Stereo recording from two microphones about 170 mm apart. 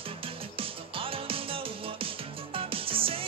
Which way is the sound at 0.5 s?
30° right (ahead or behind).